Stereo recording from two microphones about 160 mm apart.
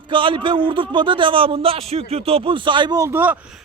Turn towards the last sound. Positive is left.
turn(degrees=-10)  # may be behind; listen again after turning